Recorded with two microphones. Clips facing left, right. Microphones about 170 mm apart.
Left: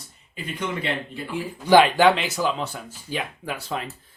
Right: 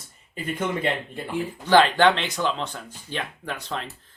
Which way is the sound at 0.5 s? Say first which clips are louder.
Right 2 dB; 50° right (ahead or behind).